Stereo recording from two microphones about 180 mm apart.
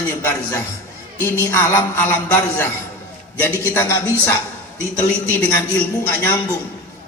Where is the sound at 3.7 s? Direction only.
10° left (ahead or behind).